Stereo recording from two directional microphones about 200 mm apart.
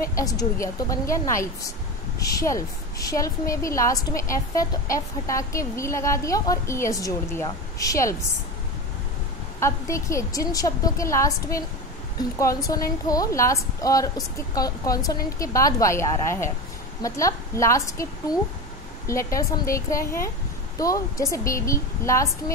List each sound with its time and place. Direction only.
0.1 s a woman's voice: 15° left (ahead or behind)
9.6 s a woman's voice: 15° left (ahead or behind)
12.6 s a woman's voice: 15° left (ahead or behind)